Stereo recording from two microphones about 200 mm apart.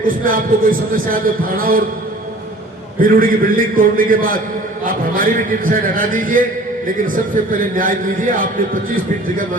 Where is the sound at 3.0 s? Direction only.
45° right (ahead or behind).